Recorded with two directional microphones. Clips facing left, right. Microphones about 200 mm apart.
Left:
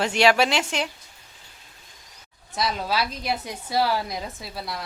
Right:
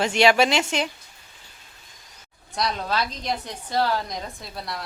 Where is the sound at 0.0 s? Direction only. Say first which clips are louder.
Right 1 dB; 5° left (ahead or behind).